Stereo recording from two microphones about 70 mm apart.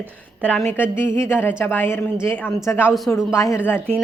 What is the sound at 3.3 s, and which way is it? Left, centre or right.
Speech, left.